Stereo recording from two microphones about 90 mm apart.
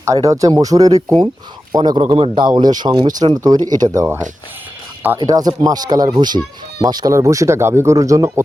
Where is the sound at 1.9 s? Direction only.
70° right (ahead or behind).